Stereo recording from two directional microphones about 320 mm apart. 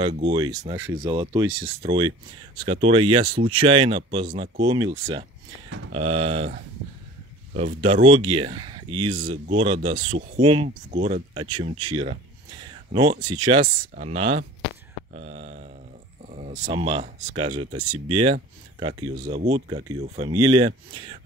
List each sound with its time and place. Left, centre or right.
0.3 s speech: centre